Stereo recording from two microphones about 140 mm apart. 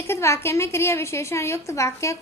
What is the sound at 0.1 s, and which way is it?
A woman's voice, 20° left (ahead or behind).